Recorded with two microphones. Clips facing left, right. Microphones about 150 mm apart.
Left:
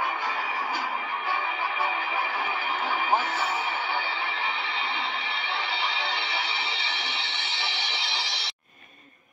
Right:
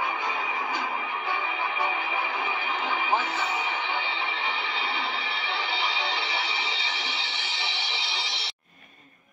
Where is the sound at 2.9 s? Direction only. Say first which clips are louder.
Left 1 dB; 40° left (ahead or behind).